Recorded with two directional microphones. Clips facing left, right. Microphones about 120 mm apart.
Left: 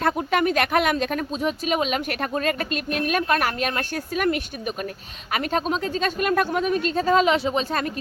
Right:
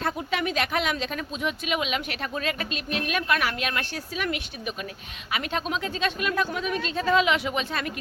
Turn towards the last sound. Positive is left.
turn(degrees=35)  # may be behind; listen again after turning